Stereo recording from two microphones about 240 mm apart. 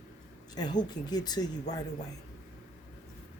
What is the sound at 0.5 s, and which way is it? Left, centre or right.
Speech, centre.